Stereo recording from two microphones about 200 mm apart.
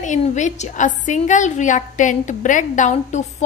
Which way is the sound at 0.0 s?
35° left (ahead or behind).